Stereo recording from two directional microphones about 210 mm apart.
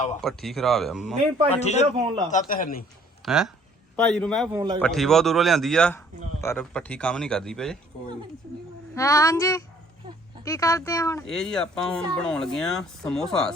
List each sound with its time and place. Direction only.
0.2 s speech: centre (ahead or behind)
1.5 s speech: 30° left (ahead or behind)
2.0 s a man's voice: 20° right (ahead or behind)
2.3 s speech: 40° left (ahead or behind)
3.2 s speech: centre (ahead or behind)
4.5 s a man's voice: 20° right (ahead or behind)
4.8 s speech: centre (ahead or behind)
9.0 s speech: 15° left (ahead or behind)
11.2 s speech: 5° left (ahead or behind)